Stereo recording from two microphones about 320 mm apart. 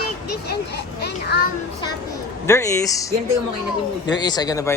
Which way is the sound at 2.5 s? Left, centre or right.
Centre.